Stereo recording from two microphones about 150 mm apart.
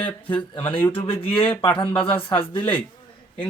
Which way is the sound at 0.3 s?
35° left (ahead or behind).